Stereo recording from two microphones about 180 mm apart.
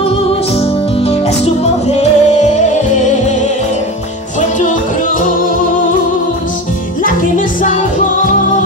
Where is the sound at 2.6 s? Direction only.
40° left (ahead or behind).